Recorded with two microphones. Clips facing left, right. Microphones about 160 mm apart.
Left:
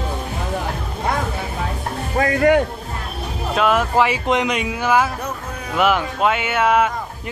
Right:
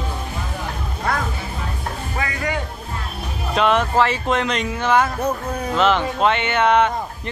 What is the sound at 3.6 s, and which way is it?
Speech, 5° left (ahead or behind).